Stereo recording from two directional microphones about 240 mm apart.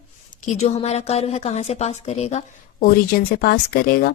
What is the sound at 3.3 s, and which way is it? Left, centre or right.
Speech, left.